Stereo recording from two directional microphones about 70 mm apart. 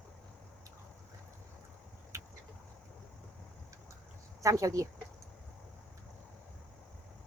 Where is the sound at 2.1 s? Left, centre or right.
Right.